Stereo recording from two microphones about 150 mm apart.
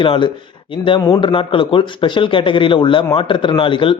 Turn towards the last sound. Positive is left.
turn(degrees=35)  # may be behind; listen again after turning